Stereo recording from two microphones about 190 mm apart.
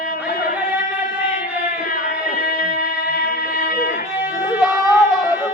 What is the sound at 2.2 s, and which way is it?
Music, 50° left (ahead or behind).